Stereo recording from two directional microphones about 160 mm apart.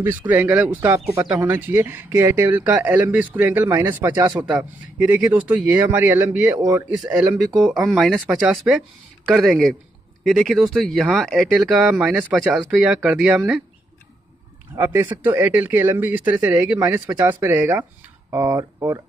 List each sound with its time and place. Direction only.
0.3 s speech: 10° right (ahead or behind)
7.6 s speech: centre (ahead or behind)
14.8 s speech: 15° right (ahead or behind)